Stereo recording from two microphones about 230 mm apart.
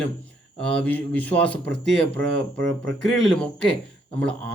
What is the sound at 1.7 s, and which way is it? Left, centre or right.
Speech, right.